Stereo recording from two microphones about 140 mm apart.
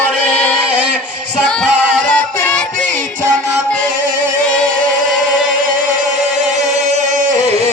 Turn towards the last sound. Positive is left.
turn(degrees=-60)  # may be behind; listen again after turning